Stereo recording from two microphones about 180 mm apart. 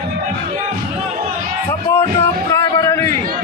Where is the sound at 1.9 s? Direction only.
15° left (ahead or behind).